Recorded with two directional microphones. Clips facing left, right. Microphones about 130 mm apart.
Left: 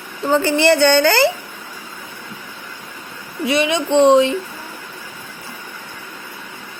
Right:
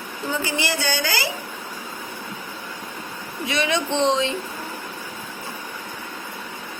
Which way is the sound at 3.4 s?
30° left (ahead or behind).